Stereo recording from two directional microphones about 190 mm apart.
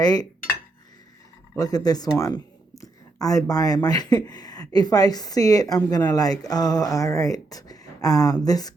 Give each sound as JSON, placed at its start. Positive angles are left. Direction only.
{"t": 0.0, "sound": "speech", "side_deg": 20}
{"t": 1.5, "sound": "speech", "side_deg": 20}